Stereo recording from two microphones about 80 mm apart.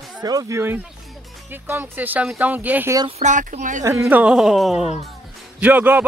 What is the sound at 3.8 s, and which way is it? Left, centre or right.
Speech, right.